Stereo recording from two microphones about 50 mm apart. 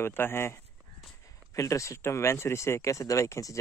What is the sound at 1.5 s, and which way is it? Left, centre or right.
Speech, left.